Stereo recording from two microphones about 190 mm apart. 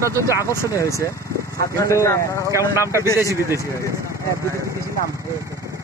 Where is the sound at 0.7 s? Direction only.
15° left (ahead or behind).